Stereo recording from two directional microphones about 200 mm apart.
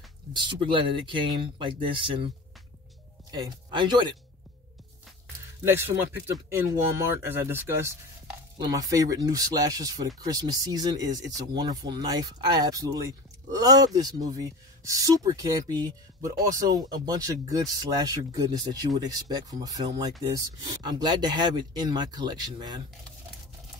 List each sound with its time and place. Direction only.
0.3 s speech: 25° right (ahead or behind)
5.6 s speech: 10° right (ahead or behind)
7.2 s speech: 10° right (ahead or behind)